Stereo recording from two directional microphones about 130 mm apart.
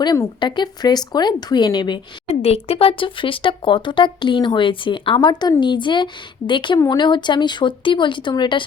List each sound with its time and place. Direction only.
0.0 s speech: 30° left (ahead or behind)
2.2 s speech: 50° left (ahead or behind)